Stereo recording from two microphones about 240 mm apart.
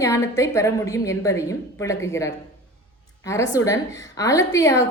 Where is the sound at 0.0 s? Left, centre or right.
Centre.